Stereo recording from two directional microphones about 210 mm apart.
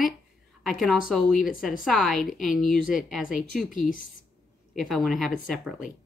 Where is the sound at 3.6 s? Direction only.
40° left (ahead or behind).